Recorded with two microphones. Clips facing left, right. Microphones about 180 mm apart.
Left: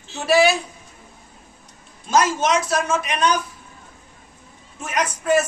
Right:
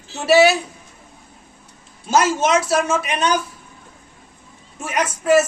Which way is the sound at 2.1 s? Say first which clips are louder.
Right 2 dB; 5° right (ahead or behind).